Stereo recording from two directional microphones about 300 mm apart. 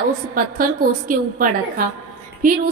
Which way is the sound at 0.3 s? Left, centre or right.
Right.